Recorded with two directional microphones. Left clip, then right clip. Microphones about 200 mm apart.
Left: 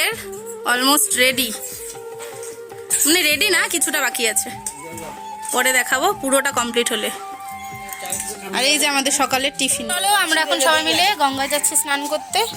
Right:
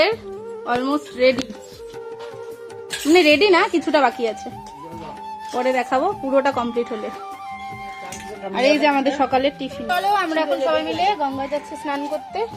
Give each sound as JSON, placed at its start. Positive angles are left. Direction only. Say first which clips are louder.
{"t": 0.6, "sound": "a woman's voice", "louder": "left 5 dB", "side_deg": 5}
{"t": 3.1, "sound": "speech", "louder": "right 3 dB", "side_deg": 0}
{"t": 5.5, "sound": "a woman's voice", "louder": "left 2 dB", "side_deg": 5}
{"t": 6.0, "sound": "a woman's voice", "louder": "left 2 dB", "side_deg": 25}
{"t": 6.7, "sound": "speech", "louder": "left 4 dB", "side_deg": 5}
{"t": 8.5, "sound": "a woman's voice", "louder": "right 1 dB", "side_deg": 10}